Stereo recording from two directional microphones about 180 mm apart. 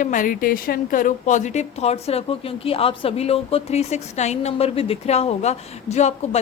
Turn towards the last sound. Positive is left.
turn(degrees=40)  # may be behind; listen again after turning